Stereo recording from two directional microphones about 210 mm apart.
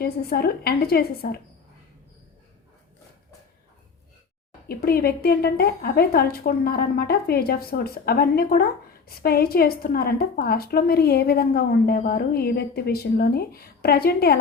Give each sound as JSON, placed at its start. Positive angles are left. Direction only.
{"t": 0.0, "sound": "a woman's voice", "side_deg": 45}
{"t": 4.7, "sound": "a woman's voice", "side_deg": 45}